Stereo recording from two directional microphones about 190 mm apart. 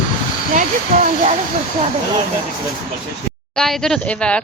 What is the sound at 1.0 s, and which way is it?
Speech, 45° right (ahead or behind).